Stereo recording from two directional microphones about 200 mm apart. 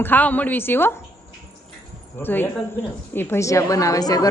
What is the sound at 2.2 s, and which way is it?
A woman's voice, 10° left (ahead or behind).